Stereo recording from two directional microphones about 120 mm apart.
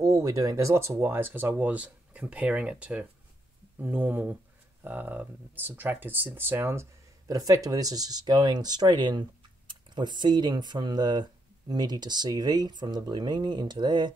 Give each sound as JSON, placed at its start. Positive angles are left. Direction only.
{"t": 0.0, "sound": "speech", "side_deg": -30}